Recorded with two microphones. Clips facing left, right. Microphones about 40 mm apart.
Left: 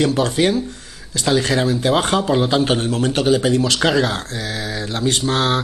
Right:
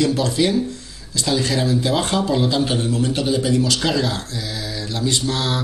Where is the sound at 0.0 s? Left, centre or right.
Left.